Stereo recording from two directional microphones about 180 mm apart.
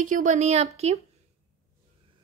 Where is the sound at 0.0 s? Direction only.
45° right (ahead or behind).